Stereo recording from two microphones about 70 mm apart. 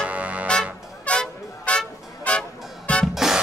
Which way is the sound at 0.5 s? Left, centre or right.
Centre.